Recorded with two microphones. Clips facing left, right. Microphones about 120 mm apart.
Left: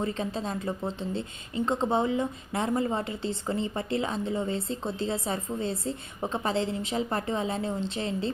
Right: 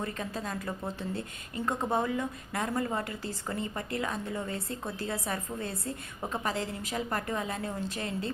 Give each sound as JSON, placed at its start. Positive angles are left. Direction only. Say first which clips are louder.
{"t": 0.0, "sound": "speech", "louder": "left 5 dB", "side_deg": 25}